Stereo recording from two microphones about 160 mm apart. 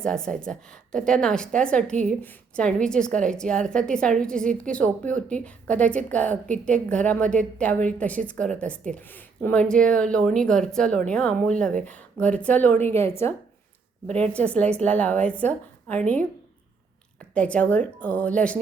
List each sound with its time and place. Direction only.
0.0 s a woman's voice: 5° left (ahead or behind)
17.3 s a woman's voice: 10° left (ahead or behind)